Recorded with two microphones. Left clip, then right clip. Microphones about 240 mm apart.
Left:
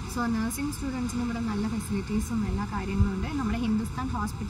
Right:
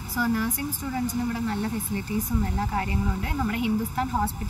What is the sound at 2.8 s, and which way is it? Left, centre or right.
Speech, centre.